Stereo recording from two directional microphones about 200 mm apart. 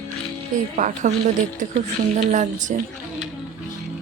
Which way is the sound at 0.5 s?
40° right (ahead or behind).